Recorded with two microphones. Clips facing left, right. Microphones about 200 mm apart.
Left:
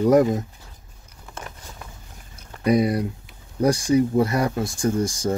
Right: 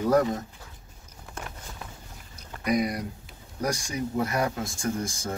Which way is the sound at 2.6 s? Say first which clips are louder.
Left 7 dB; 30° left (ahead or behind).